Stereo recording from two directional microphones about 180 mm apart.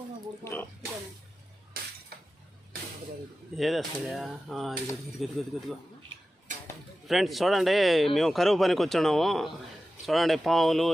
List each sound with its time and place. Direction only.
0.4 s speech: 10° left (ahead or behind)
2.1 s a sound: 60° right (ahead or behind)
3.6 s speech: centre (ahead or behind)
7.1 s speech: centre (ahead or behind)